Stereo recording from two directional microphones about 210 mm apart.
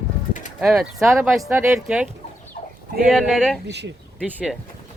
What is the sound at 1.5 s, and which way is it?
Speech, 10° right (ahead or behind).